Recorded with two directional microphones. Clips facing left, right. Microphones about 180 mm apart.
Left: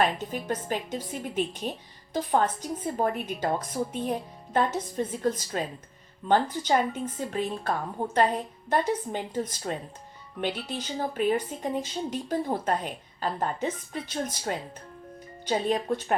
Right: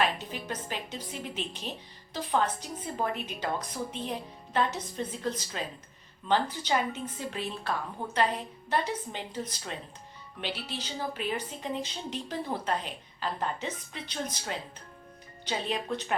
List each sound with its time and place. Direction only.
0.0 s a woman's voice: 50° left (ahead or behind)
15.4 s a woman's voice: 45° left (ahead or behind)